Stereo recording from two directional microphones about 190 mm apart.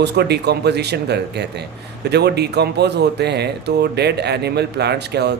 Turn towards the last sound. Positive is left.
turn(degrees=-60)  # may be behind; listen again after turning